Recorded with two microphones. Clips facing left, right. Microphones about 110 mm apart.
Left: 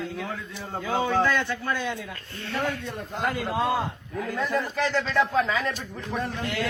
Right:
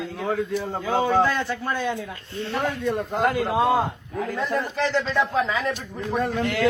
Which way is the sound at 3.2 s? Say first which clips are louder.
Right 3 dB; 55° right (ahead or behind).